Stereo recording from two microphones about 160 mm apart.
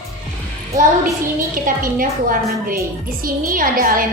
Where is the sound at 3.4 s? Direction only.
60° right (ahead or behind).